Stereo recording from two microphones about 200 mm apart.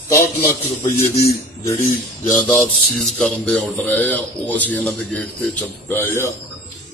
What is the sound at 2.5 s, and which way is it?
Music, 5° left (ahead or behind).